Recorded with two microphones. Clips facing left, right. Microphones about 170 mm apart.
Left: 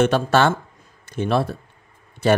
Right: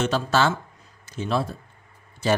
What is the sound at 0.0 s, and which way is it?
Speech, 55° left (ahead or behind).